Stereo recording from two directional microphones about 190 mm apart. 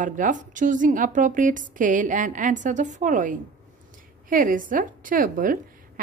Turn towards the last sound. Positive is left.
turn(degrees=-45)  # may be behind; listen again after turning